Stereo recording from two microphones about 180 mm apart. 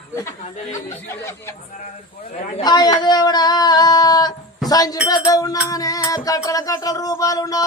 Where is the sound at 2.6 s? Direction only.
25° left (ahead or behind).